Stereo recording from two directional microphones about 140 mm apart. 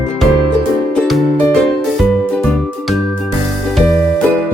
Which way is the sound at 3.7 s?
Centre (ahead or behind).